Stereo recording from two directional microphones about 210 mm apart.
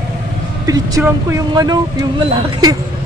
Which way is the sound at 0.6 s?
15° right (ahead or behind).